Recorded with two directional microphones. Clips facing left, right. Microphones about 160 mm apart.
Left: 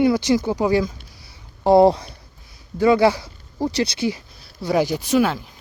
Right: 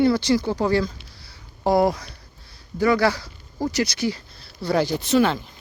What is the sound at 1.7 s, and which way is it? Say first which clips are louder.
Speech: left 7 dB; 25° left (ahead or behind).